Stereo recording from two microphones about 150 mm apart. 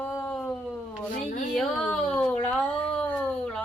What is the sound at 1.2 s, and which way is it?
Speech, 55° left (ahead or behind).